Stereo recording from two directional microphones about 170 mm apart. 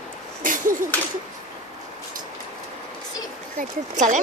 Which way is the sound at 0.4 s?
50° right (ahead or behind).